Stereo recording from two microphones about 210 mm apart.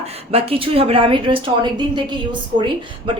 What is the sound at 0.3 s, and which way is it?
A woman's voice, 25° right (ahead or behind).